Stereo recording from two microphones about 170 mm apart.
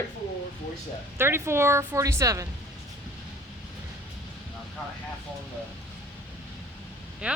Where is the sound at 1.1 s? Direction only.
15° right (ahead or behind).